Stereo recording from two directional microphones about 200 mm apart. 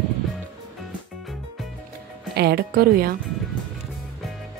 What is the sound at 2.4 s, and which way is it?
Speech, 50° right (ahead or behind).